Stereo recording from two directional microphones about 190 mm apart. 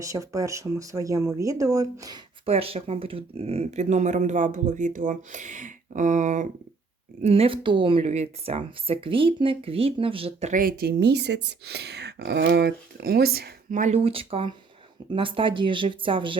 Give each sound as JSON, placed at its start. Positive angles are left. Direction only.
{"t": 0.0, "sound": "speech", "side_deg": -15}
{"t": 2.5, "sound": "speech", "side_deg": -30}
{"t": 10.5, "sound": "speech", "side_deg": -50}